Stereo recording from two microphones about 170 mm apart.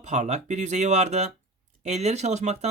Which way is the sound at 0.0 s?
45° right (ahead or behind).